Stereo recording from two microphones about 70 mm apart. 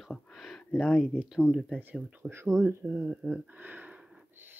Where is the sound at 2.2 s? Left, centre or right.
Right.